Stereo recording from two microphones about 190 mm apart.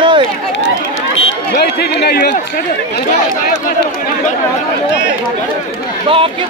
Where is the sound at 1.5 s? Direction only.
55° left (ahead or behind).